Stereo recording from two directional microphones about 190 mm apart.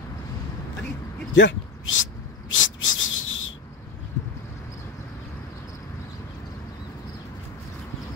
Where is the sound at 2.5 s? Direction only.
90° left.